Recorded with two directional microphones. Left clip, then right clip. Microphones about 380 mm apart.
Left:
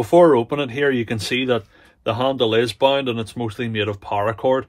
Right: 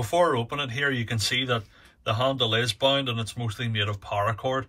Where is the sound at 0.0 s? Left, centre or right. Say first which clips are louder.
Left 10 dB; left.